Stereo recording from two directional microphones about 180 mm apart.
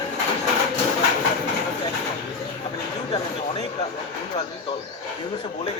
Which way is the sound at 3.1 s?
30° left (ahead or behind).